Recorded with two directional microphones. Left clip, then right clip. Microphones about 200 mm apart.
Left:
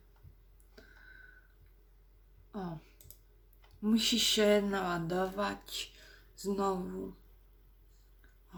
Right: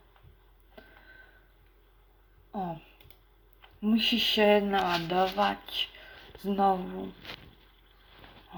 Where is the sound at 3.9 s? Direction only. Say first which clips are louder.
Right 3 dB; 10° left (ahead or behind).